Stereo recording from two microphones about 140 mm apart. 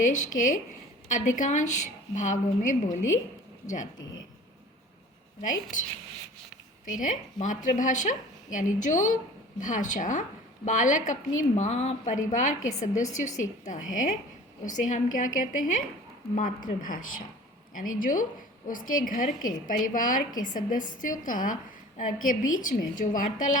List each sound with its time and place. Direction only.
0.0 s a woman's voice: 65° left (ahead or behind)
6.8 s a woman's voice: 65° left (ahead or behind)